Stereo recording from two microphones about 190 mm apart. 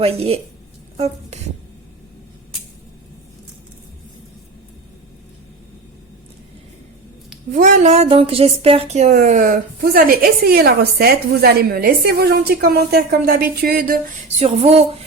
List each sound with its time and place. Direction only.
0.0 s music: 30° right (ahead or behind)
0.9 s speech: 35° right (ahead or behind)
7.5 s a woman's voice: 40° right (ahead or behind)
14.3 s music: 35° right (ahead or behind)